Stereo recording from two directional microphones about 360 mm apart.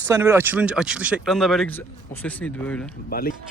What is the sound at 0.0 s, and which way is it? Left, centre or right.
A man's voice, centre.